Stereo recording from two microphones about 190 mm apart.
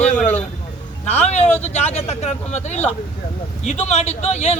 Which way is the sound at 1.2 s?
35° left (ahead or behind).